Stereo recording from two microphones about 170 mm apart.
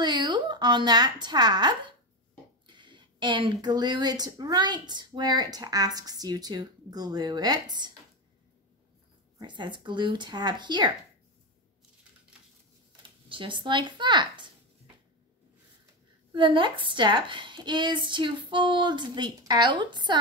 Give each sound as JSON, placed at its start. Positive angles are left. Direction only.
{"t": 0.0, "sound": "a woman's voice", "side_deg": -25}
{"t": 2.6, "sound": "a sound", "side_deg": -25}
{"t": 3.6, "sound": "speech", "side_deg": -25}
{"t": 9.4, "sound": "speech", "side_deg": -25}
{"t": 13.3, "sound": "speech", "side_deg": -30}
{"t": 16.3, "sound": "speech", "side_deg": -30}